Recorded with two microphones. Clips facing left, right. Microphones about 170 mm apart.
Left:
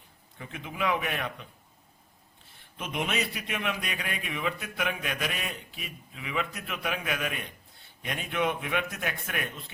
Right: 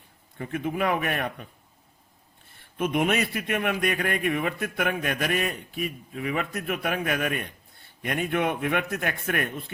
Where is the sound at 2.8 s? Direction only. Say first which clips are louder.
Right 7 dB; 50° right (ahead or behind).